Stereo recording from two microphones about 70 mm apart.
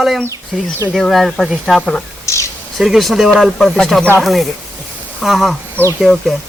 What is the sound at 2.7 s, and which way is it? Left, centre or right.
A man's voice, centre.